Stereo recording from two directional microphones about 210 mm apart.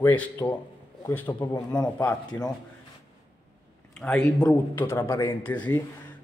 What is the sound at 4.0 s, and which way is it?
Speech, 5° left (ahead or behind).